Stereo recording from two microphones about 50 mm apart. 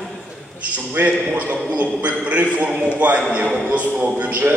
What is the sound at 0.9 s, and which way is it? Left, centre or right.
Speech, right.